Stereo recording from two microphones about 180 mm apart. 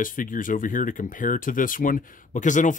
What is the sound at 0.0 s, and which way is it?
Speech, 50° left (ahead or behind).